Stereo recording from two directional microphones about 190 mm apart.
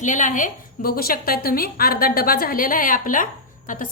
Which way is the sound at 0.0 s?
40° left (ahead or behind).